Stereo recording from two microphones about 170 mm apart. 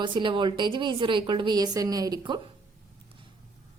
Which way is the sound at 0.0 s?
30° right (ahead or behind).